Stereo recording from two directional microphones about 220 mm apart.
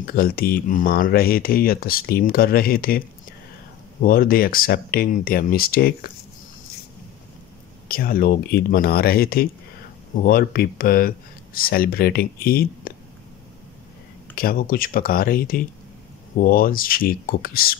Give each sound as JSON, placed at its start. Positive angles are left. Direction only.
{"t": 0.0, "sound": "speech", "side_deg": 40}
{"t": 4.0, "sound": "speech", "side_deg": 40}
{"t": 7.9, "sound": "speech", "side_deg": 40}
{"t": 14.3, "sound": "speech", "side_deg": 40}